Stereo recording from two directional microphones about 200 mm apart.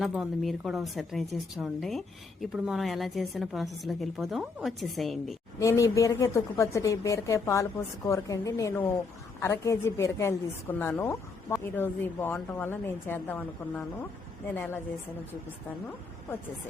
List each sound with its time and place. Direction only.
0.0 s a woman's voice: centre (ahead or behind)
5.5 s a woman's voice: 15° left (ahead or behind)